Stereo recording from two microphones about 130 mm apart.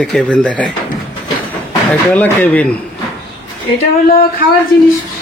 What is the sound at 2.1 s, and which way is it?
Speech, 10° left (ahead or behind).